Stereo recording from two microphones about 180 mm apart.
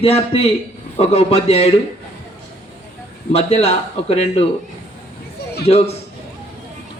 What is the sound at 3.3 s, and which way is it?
Speech, 35° left (ahead or behind).